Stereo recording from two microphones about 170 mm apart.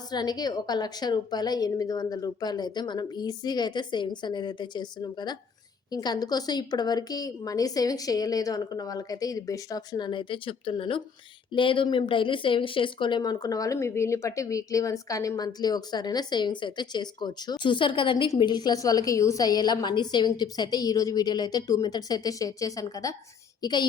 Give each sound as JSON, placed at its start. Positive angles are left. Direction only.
{"t": 0.1, "sound": "a woman's voice", "side_deg": 25}